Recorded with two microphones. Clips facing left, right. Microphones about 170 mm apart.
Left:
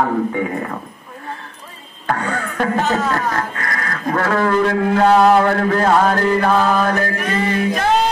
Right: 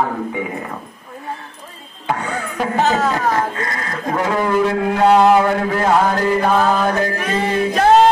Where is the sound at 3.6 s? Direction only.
25° right (ahead or behind).